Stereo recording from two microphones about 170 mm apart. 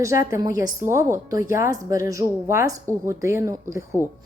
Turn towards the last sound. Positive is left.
turn(degrees=-15)  # may be behind; listen again after turning